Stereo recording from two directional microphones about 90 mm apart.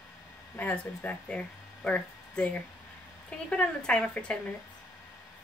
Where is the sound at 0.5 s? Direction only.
20° left (ahead or behind).